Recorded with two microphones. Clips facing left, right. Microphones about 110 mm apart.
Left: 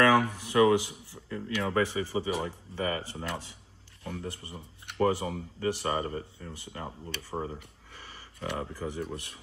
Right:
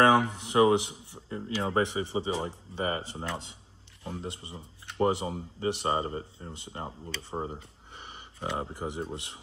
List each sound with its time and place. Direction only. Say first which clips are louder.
0.0 s speech: right 1 dB; 25° right (ahead or behind)